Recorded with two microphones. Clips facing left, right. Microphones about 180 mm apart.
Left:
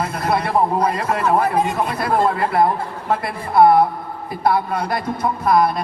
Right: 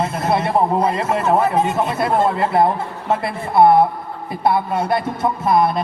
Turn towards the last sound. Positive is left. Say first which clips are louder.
# even
turn(degrees=-25)  # may be behind; listen again after turning